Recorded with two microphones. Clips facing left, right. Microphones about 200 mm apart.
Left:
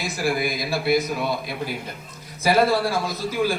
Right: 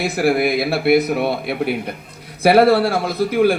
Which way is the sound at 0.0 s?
60° right (ahead or behind).